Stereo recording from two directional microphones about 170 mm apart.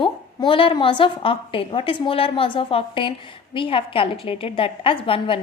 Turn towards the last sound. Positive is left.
turn(degrees=30)  # may be behind; listen again after turning